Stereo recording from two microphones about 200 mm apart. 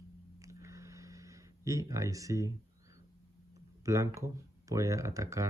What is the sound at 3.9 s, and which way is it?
Speech, 15° right (ahead or behind).